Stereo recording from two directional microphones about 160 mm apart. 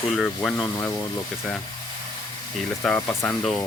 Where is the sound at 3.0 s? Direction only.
15° left (ahead or behind).